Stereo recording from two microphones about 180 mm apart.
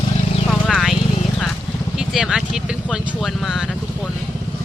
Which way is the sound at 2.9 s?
Centre (ahead or behind).